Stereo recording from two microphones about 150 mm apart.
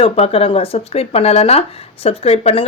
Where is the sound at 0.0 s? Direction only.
40° left (ahead or behind).